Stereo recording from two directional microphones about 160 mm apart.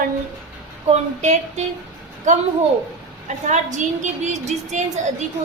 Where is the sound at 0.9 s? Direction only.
45° right (ahead or behind).